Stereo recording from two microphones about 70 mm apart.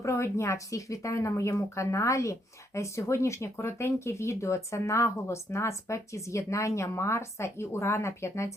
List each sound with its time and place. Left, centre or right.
0.0 s speech: left